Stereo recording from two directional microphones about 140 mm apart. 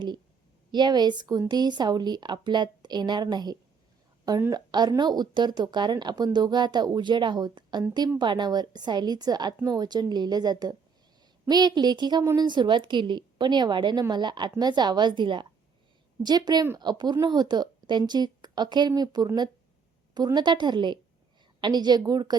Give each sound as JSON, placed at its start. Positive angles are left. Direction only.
{"t": 0.7, "sound": "speech", "side_deg": -30}
{"t": 4.4, "sound": "speech", "side_deg": -20}
{"t": 4.7, "sound": "speech", "side_deg": -30}
{"t": 12.2, "sound": "speech", "side_deg": -20}
{"t": 12.5, "sound": "speech", "side_deg": -35}